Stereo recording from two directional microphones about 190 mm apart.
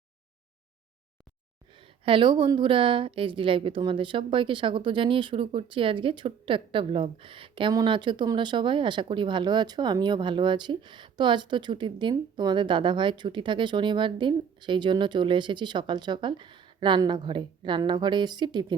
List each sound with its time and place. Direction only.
1.7 s a woman's voice: 25° right (ahead or behind)